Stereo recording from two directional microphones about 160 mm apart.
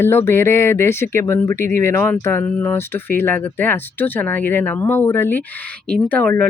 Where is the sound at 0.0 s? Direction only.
15° left (ahead or behind).